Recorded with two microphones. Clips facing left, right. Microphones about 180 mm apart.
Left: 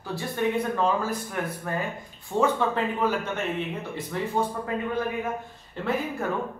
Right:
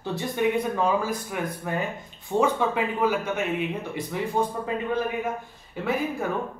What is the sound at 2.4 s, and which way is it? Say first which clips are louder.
Speech: even; 10° right (ahead or behind).